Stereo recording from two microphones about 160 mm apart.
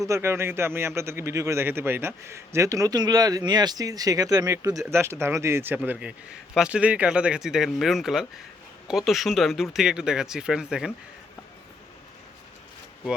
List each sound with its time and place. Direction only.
0.0 s a man's voice: 15° right (ahead or behind)